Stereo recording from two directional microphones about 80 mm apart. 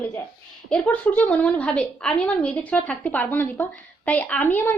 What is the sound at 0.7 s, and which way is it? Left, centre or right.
A woman's voice, centre.